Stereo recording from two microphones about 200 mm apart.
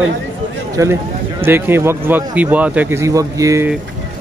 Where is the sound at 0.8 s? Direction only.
15° right (ahead or behind).